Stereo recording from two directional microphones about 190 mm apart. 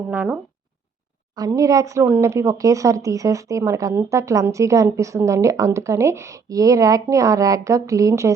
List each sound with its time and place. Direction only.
0.1 s speech: 10° right (ahead or behind)
1.4 s speech: 15° right (ahead or behind)